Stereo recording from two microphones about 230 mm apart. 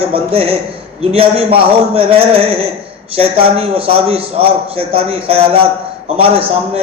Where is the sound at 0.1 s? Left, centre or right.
Right.